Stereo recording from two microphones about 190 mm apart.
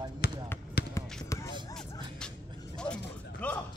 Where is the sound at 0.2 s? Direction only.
55° left (ahead or behind).